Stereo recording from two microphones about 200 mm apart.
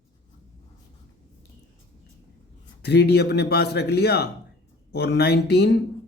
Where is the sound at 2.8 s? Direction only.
55° left (ahead or behind).